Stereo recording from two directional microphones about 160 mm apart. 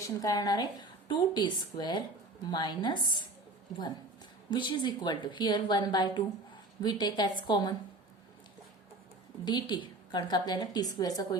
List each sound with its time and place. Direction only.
0.2 s a woman's voice: 25° left (ahead or behind)
4.5 s a woman's voice: 30° left (ahead or behind)
9.4 s a woman's voice: 30° left (ahead or behind)